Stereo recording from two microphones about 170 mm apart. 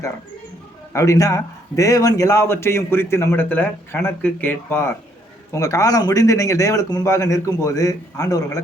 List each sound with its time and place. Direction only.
0.9 s a man's voice: 20° left (ahead or behind)